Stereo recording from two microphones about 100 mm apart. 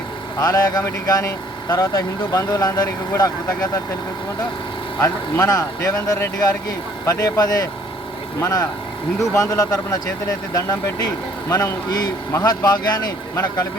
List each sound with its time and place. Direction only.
0.3 s speech: 35° left (ahead or behind)
4.9 s speech: 30° left (ahead or behind)